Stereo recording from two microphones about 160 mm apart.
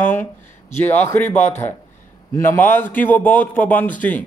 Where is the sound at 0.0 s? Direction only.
15° left (ahead or behind).